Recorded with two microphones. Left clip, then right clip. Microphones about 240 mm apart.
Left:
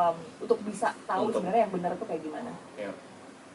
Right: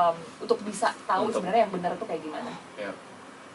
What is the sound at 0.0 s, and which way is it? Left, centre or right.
A woman's voice, centre.